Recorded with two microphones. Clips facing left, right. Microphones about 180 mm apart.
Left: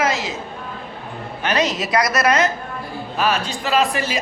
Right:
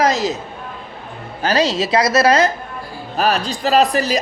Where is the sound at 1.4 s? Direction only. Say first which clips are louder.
Right 4 dB; 30° right (ahead or behind).